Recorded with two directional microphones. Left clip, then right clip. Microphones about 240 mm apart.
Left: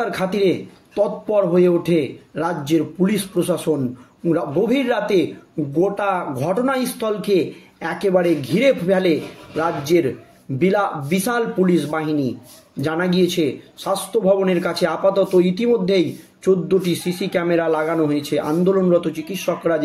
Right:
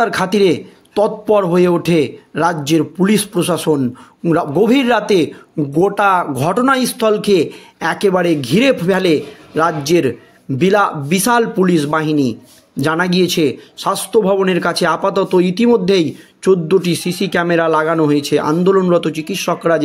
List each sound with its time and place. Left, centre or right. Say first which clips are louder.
0.0 s speech: right 6 dB; right